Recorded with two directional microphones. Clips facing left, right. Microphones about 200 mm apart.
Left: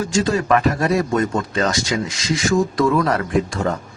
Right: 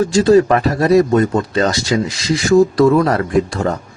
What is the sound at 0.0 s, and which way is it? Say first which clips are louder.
Speech: right 9 dB; 35° right (ahead or behind).